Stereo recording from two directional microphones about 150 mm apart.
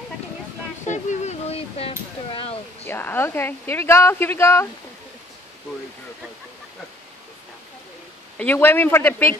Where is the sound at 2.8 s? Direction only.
15° left (ahead or behind).